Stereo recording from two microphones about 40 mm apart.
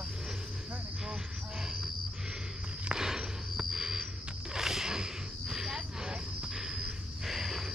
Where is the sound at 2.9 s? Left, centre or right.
Centre.